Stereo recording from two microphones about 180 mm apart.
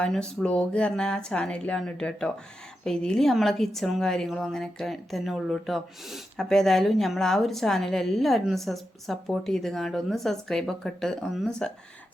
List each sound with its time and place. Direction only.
0.0 s a woman's voice: 5° left (ahead or behind)